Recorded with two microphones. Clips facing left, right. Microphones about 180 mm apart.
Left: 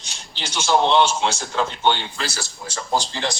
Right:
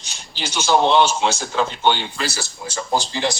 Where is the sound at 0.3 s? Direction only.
5° right (ahead or behind).